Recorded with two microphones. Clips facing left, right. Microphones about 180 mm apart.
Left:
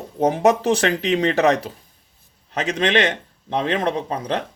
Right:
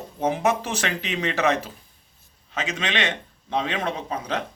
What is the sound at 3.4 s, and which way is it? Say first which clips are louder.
Speech: left 5 dB; 35° left (ahead or behind).